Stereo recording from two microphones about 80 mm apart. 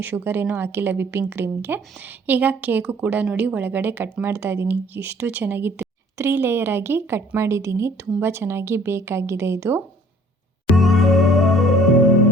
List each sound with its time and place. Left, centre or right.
0.0 s speech: right
10.8 s music: centre